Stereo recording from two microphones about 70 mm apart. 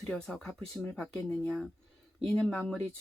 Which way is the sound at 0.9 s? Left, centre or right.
Left.